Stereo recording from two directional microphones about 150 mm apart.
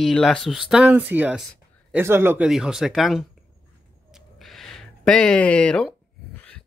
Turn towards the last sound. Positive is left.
turn(degrees=5)  # may be behind; listen again after turning